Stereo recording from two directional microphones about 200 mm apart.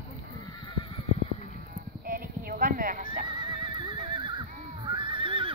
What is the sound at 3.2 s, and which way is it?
Horse, 20° right (ahead or behind).